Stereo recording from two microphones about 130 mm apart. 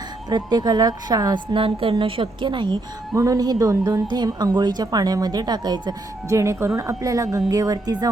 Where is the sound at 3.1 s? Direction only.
25° right (ahead or behind).